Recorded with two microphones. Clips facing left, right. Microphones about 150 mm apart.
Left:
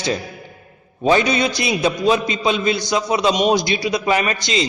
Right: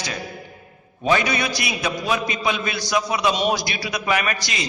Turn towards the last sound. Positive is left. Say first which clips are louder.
# left 4 dB
turn(degrees=25)  # may be behind; listen again after turning